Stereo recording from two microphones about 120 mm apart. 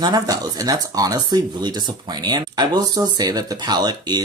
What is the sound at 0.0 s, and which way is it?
Speech, 35° right (ahead or behind).